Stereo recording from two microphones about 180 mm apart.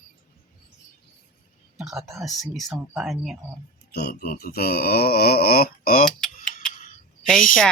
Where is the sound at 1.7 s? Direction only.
Centre (ahead or behind).